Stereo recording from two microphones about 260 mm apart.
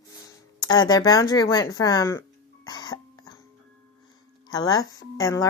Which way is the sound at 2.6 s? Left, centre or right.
Centre.